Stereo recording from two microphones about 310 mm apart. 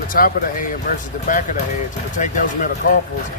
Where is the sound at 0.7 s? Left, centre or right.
Left.